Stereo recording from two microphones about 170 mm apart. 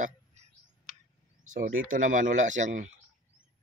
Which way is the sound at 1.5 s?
50° right (ahead or behind).